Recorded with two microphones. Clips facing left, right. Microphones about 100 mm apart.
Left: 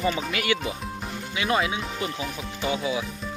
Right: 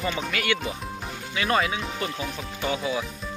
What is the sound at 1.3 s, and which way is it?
Speech, 10° left (ahead or behind).